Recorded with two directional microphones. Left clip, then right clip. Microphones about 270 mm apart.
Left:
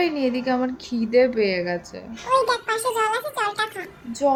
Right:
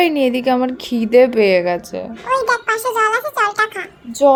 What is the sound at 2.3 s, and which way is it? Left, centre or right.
Speech, right.